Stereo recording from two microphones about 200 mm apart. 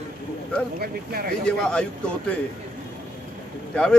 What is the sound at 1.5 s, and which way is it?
Speech, 5° left (ahead or behind).